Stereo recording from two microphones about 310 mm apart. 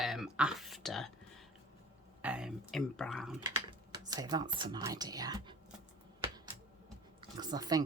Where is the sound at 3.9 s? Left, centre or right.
Centre.